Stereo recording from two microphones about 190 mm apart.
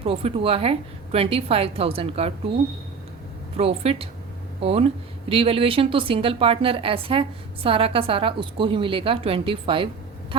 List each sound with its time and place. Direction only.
0.0 s a woman's voice: 30° right (ahead or behind)
3.6 s a woman's voice: 30° right (ahead or behind)